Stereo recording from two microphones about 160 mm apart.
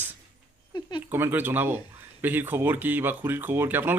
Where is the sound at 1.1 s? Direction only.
15° right (ahead or behind).